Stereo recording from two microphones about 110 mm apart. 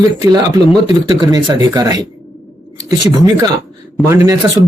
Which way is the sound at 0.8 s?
40° right (ahead or behind).